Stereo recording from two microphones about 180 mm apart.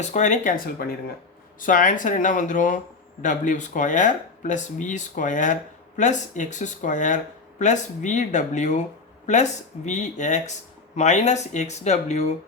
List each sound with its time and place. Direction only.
0.0 s speech: 40° left (ahead or behind)